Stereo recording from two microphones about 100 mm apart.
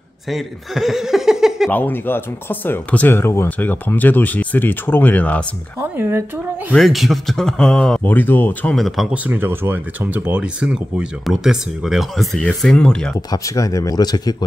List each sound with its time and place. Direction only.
0.3 s speech: centre (ahead or behind)
1.7 s speech: 20° left (ahead or behind)
5.8 s speech: 25° right (ahead or behind)
6.7 s speech: centre (ahead or behind)
8.0 s speech: 20° left (ahead or behind)
8.7 s speech: centre (ahead or behind)
9.1 s speech: 15° right (ahead or behind); by 13.1 s 10° left (ahead or behind)
13.3 s speech: 35° left (ahead or behind)